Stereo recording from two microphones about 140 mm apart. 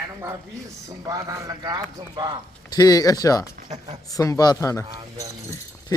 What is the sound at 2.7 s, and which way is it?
Speech, 25° left (ahead or behind).